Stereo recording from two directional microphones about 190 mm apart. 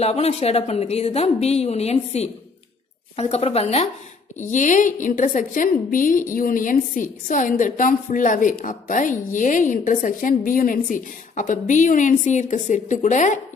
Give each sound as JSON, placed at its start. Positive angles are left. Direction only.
{"t": 0.0, "sound": "a woman's voice", "side_deg": 35}